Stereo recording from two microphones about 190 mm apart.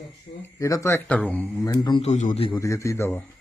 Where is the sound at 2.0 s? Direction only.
35° left (ahead or behind).